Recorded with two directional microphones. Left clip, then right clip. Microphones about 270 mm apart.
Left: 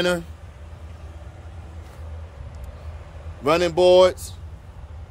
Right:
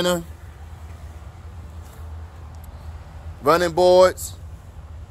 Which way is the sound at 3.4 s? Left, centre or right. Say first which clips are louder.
Right 1 dB; centre.